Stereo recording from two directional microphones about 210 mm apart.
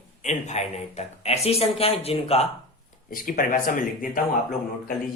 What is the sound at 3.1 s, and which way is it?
Speech, 40° left (ahead or behind).